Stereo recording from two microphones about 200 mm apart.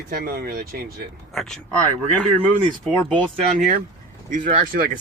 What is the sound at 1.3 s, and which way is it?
Speech, 5° left (ahead or behind).